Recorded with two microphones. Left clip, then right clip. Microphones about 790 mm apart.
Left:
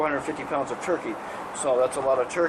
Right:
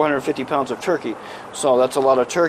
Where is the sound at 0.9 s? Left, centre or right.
Right.